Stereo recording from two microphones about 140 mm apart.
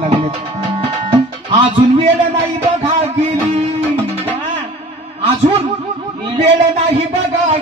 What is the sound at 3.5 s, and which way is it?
Music, 45° right (ahead or behind).